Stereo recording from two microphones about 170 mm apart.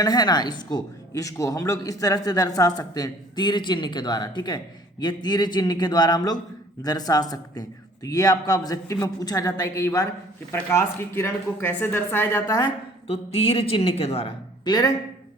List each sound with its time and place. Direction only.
0.0 s a woman's voice: 25° left (ahead or behind)
13.1 s a woman's voice: 35° left (ahead or behind)